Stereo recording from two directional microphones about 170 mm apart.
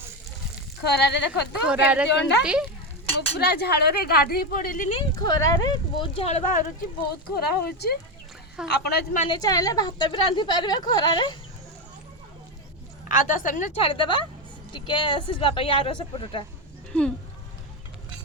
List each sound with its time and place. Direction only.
0.9 s speech: 85° left
1.6 s speech: 5° right (ahead or behind)
2.0 s speech: 85° left
2.4 s speech: 5° right (ahead or behind)
3.3 s speech: 70° left (ahead or behind); by 4.9 s 55° left (ahead or behind)
4.9 s speech: 30° left (ahead or behind); by 6.7 s 50° left (ahead or behind)
7.3 s a woman's voice: 65° left (ahead or behind)
9.3 s a woman's voice: 20° left (ahead or behind)
13.1 s a woman's voice: 50° left (ahead or behind)
13.8 s a woman's voice: 30° left (ahead or behind)
16.9 s speech: 5° left (ahead or behind)